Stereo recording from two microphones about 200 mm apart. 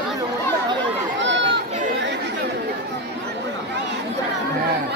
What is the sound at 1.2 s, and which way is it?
Run, 65° right (ahead or behind).